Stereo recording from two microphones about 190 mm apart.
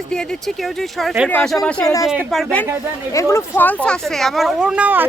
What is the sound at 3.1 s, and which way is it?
Speech, 15° left (ahead or behind).